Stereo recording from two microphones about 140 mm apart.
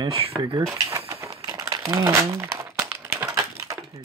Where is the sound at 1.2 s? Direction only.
25° right (ahead or behind).